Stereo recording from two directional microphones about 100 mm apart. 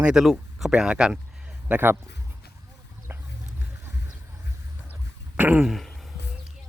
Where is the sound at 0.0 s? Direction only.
5° right (ahead or behind).